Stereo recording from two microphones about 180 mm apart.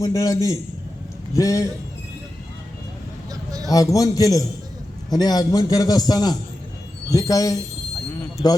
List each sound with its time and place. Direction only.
0.0 s a man's voice: 20° left (ahead or behind)
3.7 s a man's voice: 20° left (ahead or behind)